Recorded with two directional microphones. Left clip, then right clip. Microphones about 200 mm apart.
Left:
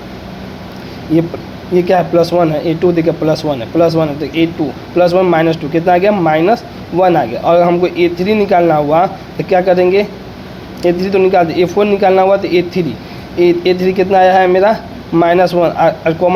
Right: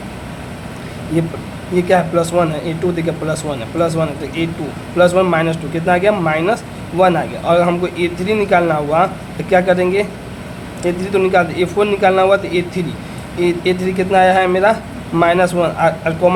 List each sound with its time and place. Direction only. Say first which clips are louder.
1.7 s speech: left 3 dB; 20° left (ahead or behind)